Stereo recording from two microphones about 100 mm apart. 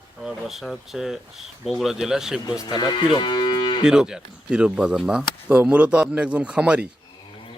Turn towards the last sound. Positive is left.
turn(degrees=-10)  # may be behind; listen again after turning